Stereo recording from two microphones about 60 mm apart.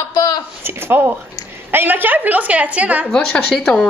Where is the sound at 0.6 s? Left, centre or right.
Right.